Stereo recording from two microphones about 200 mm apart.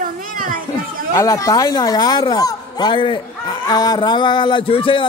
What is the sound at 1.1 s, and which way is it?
Speech, 15° left (ahead or behind).